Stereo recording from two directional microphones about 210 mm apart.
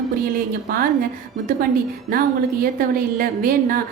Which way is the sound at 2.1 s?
45° right (ahead or behind).